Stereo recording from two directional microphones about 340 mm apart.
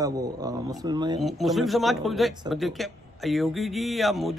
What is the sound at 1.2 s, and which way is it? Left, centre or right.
Speech, centre.